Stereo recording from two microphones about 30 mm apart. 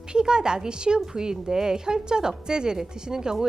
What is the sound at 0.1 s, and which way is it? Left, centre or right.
A woman's voice, right.